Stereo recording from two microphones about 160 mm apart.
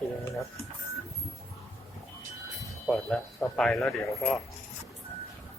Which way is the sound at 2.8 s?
Centre (ahead or behind).